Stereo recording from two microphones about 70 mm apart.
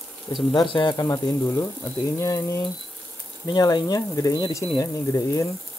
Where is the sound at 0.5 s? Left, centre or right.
Left.